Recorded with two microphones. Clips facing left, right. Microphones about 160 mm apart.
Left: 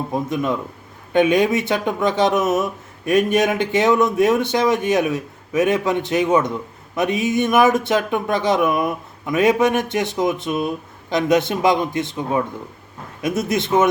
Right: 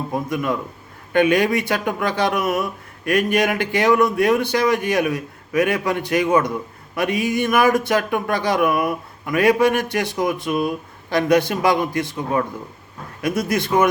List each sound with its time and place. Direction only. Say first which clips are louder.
0.1 s a man's voice: left 1 dB; 20° left (ahead or behind)